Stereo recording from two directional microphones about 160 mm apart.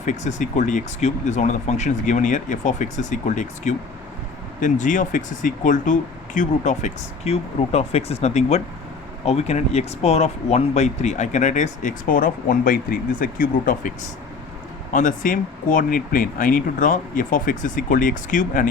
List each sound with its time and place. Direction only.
0.0 s speech: 50° left (ahead or behind)
14.9 s speech: 55° left (ahead or behind)